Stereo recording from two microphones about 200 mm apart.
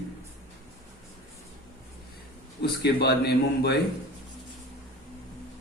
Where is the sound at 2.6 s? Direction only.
55° left (ahead or behind).